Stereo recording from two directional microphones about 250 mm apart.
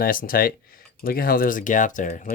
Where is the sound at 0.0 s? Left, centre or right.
Left.